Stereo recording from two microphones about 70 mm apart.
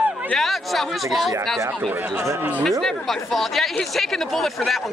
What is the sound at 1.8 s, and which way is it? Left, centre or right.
Speech, right.